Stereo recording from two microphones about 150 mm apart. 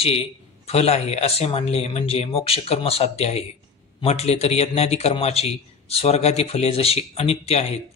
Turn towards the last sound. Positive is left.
turn(degrees=45)  # may be behind; listen again after turning